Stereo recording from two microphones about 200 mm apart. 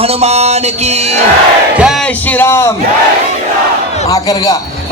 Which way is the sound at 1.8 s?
Centre (ahead or behind).